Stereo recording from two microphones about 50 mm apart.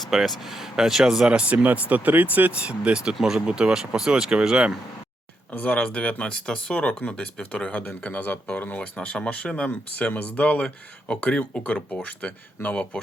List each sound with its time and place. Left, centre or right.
0.0 s speech: centre; by 2.5 s right
2.5 s speech: right
5.5 s speech: left
5.7 s speech: left
9.6 s speech: left